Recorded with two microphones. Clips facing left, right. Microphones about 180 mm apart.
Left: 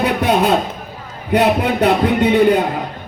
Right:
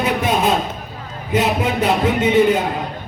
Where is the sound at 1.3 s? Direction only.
65° left (ahead or behind).